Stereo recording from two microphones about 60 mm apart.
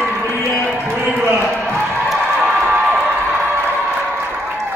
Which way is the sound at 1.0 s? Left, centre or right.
Right.